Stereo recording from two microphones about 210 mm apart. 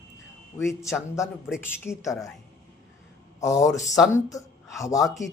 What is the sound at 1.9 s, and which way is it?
Speech, 15° left (ahead or behind).